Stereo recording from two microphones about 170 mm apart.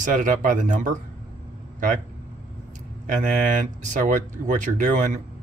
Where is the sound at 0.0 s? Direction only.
50° right (ahead or behind).